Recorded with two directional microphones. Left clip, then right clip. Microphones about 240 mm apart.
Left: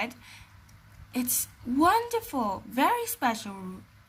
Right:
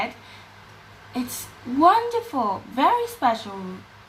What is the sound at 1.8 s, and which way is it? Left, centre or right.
A woman's voice, left.